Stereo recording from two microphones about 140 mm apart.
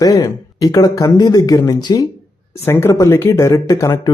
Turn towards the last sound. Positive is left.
turn(degrees=25)  # may be behind; listen again after turning